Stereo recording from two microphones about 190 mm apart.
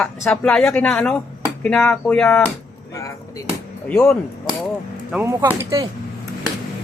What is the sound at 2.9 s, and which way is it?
Speech, 15° left (ahead or behind).